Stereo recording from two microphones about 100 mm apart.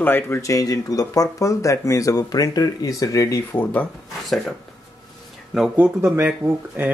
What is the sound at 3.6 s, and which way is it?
Speech, 15° left (ahead or behind).